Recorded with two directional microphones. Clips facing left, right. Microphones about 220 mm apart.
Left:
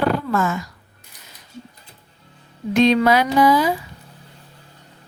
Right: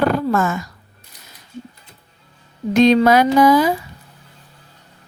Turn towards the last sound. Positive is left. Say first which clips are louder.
# right 3 dB
turn(degrees=-45)  # may be behind; listen again after turning